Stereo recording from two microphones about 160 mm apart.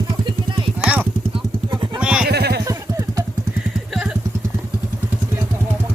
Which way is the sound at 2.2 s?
90° right.